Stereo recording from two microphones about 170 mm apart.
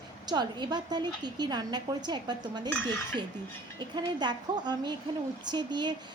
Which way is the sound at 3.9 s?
25° right (ahead or behind).